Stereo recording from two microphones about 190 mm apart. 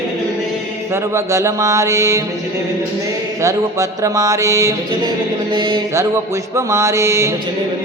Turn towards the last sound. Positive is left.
turn(degrees=-15)  # may be behind; listen again after turning